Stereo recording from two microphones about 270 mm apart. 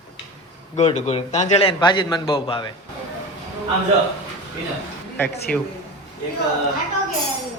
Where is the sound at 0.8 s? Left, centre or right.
Left.